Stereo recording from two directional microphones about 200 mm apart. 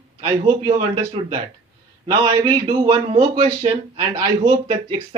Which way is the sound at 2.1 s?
25° right (ahead or behind).